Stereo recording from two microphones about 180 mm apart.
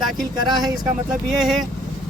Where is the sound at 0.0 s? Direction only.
Centre (ahead or behind).